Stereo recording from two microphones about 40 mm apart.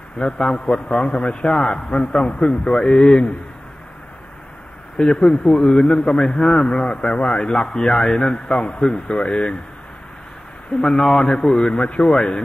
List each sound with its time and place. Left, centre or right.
0.2 s a man's voice: centre
4.9 s a man's voice: left
8.9 s speech: centre
9.2 s a man's voice: left
10.8 s a man's voice: centre